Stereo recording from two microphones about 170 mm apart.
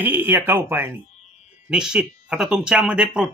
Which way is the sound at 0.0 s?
10° right (ahead or behind).